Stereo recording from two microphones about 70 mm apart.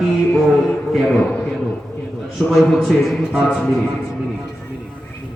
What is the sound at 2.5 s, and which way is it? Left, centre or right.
A man's voice, centre.